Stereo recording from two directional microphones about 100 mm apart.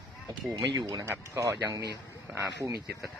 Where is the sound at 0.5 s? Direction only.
35° right (ahead or behind).